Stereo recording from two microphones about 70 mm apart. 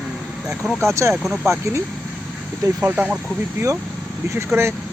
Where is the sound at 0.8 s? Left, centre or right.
Right.